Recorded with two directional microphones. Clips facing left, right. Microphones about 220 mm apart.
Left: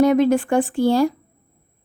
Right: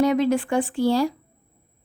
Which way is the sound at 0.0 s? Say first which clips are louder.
Left 4 dB; 50° left (ahead or behind).